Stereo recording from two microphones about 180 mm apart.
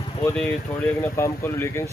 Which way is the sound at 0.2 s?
10° left (ahead or behind).